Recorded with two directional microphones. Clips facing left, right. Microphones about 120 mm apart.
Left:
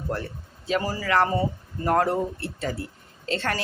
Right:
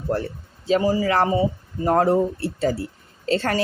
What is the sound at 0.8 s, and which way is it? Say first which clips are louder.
Speech: right 2 dB; 20° right (ahead or behind).